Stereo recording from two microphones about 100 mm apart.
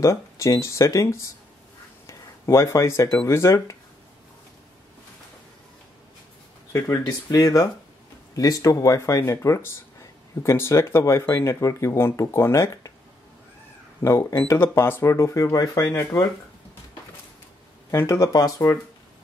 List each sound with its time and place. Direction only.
0.0 s speech: 30° left (ahead or behind)
6.7 s speech: 35° left (ahead or behind)
14.0 s speech: 30° left (ahead or behind)
17.9 s speech: 30° left (ahead or behind)